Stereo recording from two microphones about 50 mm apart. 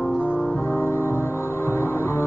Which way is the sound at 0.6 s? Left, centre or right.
Left.